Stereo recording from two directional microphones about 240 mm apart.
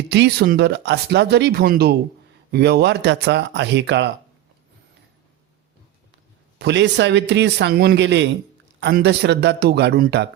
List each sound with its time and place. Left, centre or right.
0.1 s speech: right
6.6 s speech: right